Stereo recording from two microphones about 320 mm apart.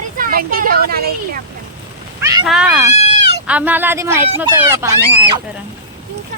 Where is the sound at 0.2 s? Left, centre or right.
Right.